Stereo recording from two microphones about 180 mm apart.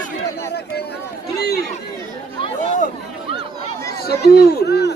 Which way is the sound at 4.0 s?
60° left (ahead or behind).